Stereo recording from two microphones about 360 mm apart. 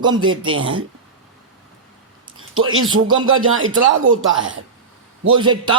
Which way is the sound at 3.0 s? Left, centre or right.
Centre.